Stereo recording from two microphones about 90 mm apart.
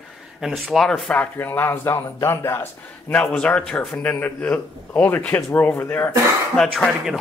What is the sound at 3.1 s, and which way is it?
A man's voice, 10° left (ahead or behind).